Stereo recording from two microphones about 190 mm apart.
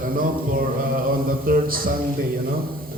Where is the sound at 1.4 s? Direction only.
50° right (ahead or behind).